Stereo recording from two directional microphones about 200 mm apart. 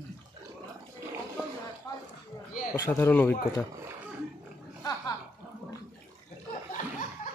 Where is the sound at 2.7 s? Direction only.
15° left (ahead or behind).